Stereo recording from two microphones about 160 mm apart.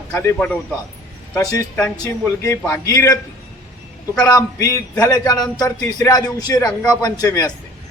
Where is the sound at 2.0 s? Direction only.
20° left (ahead or behind).